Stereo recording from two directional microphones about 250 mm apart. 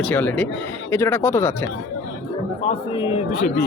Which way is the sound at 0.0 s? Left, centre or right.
Centre.